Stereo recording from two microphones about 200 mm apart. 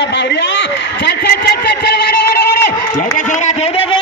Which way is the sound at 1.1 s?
55° left (ahead or behind).